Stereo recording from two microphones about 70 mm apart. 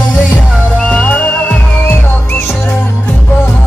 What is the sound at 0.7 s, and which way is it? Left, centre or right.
Music, centre.